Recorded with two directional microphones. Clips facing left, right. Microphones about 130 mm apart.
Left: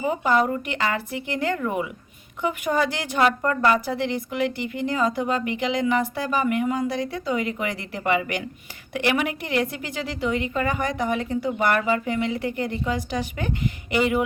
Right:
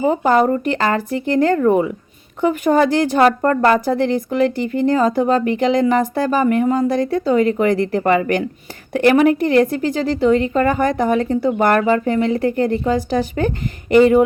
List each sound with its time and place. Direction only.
0.0 s a woman's voice: 35° right (ahead or behind)